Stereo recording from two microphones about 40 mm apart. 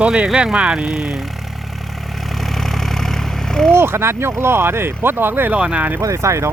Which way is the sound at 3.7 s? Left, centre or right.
Right.